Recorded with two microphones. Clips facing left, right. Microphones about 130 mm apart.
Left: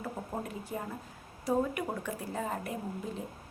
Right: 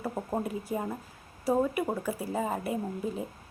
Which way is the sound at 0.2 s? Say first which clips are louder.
Right 5 dB; 35° right (ahead or behind).